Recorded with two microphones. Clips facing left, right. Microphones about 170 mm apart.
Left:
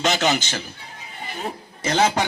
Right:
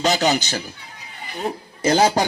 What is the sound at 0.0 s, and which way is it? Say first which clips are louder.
Speech: right 2 dB; 35° right (ahead or behind).